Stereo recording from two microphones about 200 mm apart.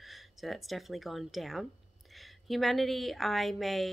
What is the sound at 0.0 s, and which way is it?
A woman's voice, centre (ahead or behind).